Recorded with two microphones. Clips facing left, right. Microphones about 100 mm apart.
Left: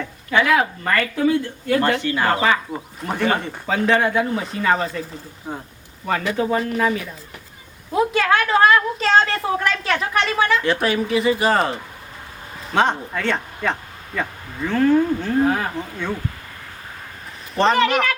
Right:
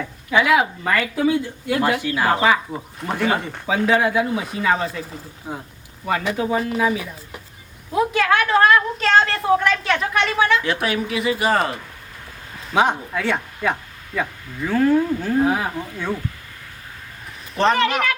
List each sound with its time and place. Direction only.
0.0 s speech: 10° right (ahead or behind)
17.6 s speech: centre (ahead or behind)